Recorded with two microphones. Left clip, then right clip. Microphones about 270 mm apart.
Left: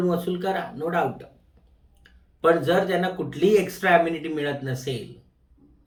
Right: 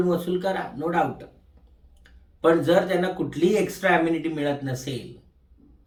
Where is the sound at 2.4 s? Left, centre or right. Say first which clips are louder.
Right 1 dB; centre.